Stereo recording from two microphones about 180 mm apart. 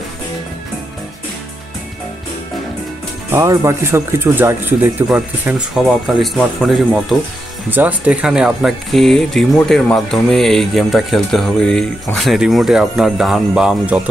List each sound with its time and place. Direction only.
3.3 s speech: 15° right (ahead or behind)